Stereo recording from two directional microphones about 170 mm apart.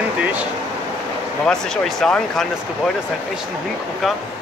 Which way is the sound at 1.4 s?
5° left (ahead or behind).